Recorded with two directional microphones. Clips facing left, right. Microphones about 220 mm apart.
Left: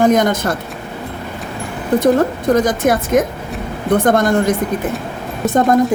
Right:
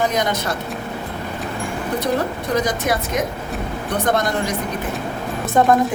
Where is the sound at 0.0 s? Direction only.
50° left (ahead or behind).